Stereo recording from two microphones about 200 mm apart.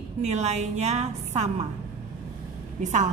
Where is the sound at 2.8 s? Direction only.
35° right (ahead or behind).